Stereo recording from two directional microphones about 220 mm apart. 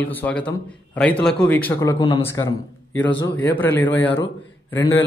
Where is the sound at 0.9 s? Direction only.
5° left (ahead or behind).